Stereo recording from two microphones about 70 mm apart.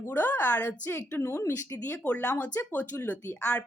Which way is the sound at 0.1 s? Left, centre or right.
Left.